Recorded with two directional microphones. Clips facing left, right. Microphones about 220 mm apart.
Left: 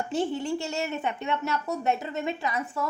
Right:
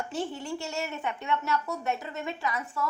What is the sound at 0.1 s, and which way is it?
A woman's voice, 20° left (ahead or behind).